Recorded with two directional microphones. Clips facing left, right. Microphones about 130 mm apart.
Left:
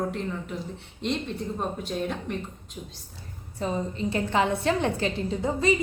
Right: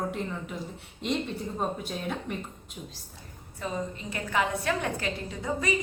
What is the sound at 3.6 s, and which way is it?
A woman's voice, 30° left (ahead or behind).